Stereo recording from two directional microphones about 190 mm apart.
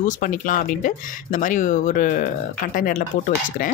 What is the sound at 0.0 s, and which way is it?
Speech, 45° left (ahead or behind).